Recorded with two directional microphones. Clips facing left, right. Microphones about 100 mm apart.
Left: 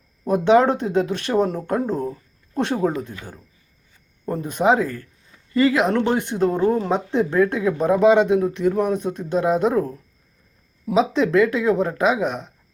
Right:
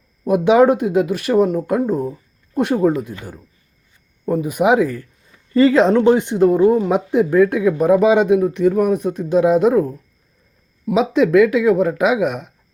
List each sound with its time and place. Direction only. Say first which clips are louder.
0.3 s speech: right 3 dB; 10° right (ahead or behind)
5.5 s speech: right 5 dB; 30° right (ahead or behind)
5.9 s speech: right 7 dB; 20° right (ahead or behind)
11.1 s speech: right 5 dB; 10° right (ahead or behind)